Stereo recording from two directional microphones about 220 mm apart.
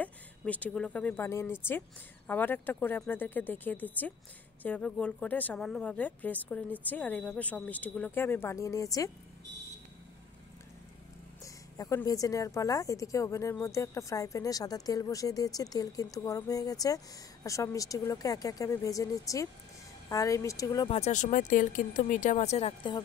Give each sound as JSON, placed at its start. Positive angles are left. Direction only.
{"t": 0.0, "sound": "speech", "side_deg": 5}
{"t": 11.4, "sound": "speech", "side_deg": 15}